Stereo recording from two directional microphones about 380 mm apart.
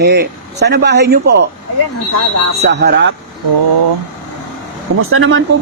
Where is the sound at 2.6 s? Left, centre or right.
Right.